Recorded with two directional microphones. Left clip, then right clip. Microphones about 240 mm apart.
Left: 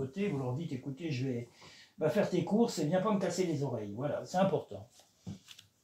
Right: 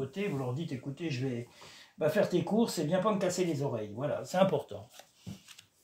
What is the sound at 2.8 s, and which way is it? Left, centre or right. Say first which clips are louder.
Speech: right 1 dB; right.